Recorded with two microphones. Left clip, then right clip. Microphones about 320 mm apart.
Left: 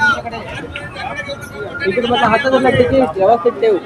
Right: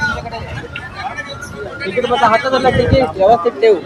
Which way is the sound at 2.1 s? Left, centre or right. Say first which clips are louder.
Right 1 dB; right.